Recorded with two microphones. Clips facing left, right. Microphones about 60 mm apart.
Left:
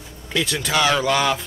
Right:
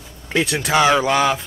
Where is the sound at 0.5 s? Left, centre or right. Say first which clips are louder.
Right 4 dB; right.